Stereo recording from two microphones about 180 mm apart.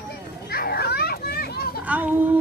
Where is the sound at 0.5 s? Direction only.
60° left (ahead or behind).